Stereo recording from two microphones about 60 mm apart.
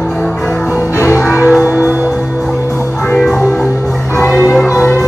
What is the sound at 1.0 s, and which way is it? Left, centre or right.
Music, left.